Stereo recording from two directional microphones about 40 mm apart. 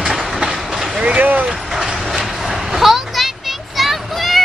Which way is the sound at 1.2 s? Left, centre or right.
Right.